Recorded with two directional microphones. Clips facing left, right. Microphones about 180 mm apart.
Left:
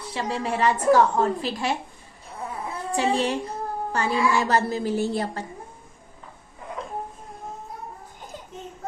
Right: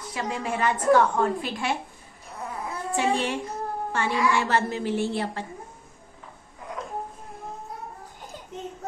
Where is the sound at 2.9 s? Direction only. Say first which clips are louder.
Left 2 dB; 35° left (ahead or behind).